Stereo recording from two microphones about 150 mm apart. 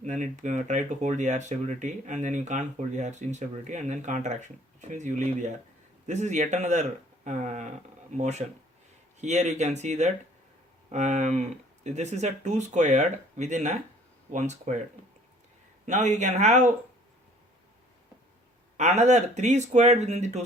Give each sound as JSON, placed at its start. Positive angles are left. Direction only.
{"t": 0.0, "sound": "speech", "side_deg": -55}
{"t": 15.9, "sound": "speech", "side_deg": -50}
{"t": 18.8, "sound": "speech", "side_deg": -50}